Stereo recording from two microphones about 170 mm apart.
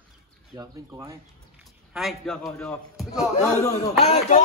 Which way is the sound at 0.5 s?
15° right (ahead or behind).